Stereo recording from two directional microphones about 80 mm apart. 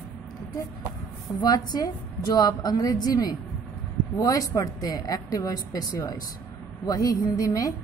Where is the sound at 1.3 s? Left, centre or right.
Left.